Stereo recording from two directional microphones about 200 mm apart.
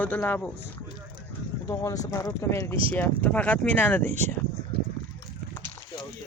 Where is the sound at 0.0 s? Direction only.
10° left (ahead or behind).